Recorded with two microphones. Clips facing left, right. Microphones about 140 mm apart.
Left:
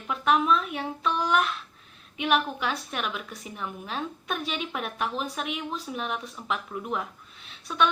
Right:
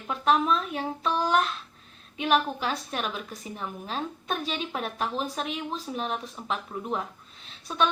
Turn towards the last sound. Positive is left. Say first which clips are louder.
# left 1 dB
turn(degrees=-35)  # may be behind; listen again after turning